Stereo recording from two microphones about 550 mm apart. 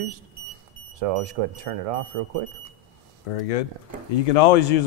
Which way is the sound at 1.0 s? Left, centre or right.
Right.